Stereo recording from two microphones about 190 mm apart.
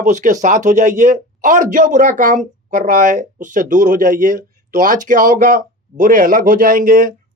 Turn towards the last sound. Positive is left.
turn(degrees=-45)  # may be behind; listen again after turning